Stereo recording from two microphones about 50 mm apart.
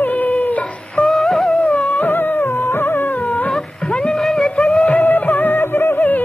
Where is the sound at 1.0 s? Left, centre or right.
Centre.